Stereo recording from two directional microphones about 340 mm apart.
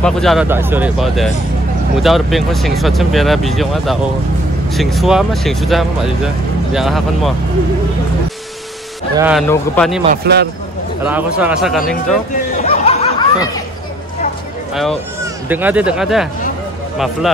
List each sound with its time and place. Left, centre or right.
0.0 s speech: centre
9.1 s speech: centre
10.0 s a man's voice: right
11.1 s speech: centre
12.6 s a sound: centre
15.4 s speech: centre